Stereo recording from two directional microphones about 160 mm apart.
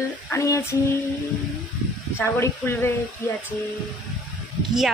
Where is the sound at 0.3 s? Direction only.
20° left (ahead or behind).